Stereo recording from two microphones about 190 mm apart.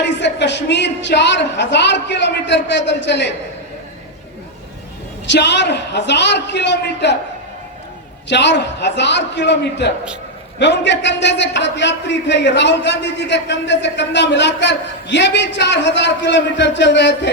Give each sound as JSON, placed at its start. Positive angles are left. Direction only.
{"t": 0.0, "sound": "a woman's voice", "side_deg": 65}
{"t": 5.3, "sound": "a woman's voice", "side_deg": 65}
{"t": 8.3, "sound": "a man's voice", "side_deg": 65}